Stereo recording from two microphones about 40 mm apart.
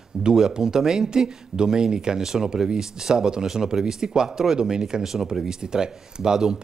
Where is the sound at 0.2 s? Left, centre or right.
Centre.